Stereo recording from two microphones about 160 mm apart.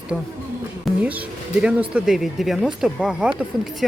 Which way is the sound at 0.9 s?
Centre (ahead or behind).